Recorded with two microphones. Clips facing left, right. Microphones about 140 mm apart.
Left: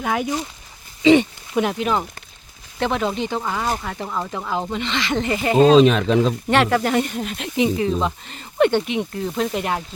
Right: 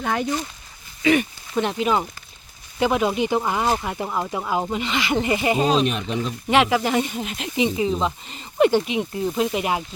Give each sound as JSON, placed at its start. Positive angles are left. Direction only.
{"t": 0.0, "sound": "speech", "side_deg": 5}
{"t": 1.0, "sound": "speech", "side_deg": 25}
{"t": 1.5, "sound": "speech", "side_deg": 0}
{"t": 6.0, "sound": "speech", "side_deg": 90}
{"t": 6.5, "sound": "speech", "side_deg": -5}